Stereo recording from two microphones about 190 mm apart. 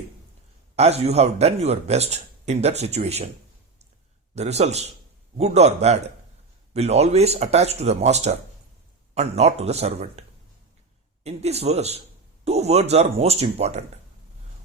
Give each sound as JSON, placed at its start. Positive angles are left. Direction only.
{"t": 0.8, "sound": "a man's voice", "side_deg": -35}
{"t": 4.4, "sound": "a man's voice", "side_deg": -35}